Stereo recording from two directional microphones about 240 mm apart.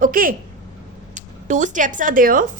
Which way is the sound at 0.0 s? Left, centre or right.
Right.